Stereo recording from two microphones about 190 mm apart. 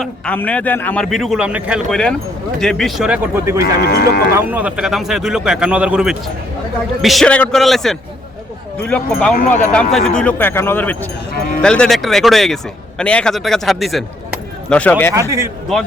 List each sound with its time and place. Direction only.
0.0 s a man's voice: 5° left (ahead or behind); by 3.6 s 15° right (ahead or behind)
3.8 s speech: 55° left (ahead or behind)
4.4 s a man's voice: 10° right (ahead or behind); by 15.1 s 10° left (ahead or behind)